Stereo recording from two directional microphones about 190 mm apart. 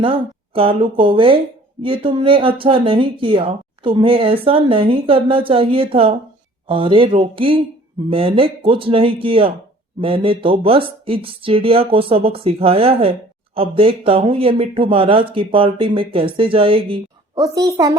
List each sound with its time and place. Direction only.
0.0 s speech: 30° right (ahead or behind)